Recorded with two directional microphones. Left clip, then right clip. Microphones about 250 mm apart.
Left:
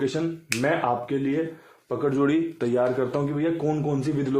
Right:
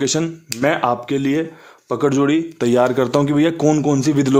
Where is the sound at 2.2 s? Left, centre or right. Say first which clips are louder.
Right 6 dB; right.